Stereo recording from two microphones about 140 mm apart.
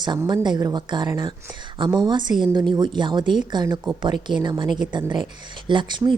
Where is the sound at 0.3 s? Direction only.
30° right (ahead or behind).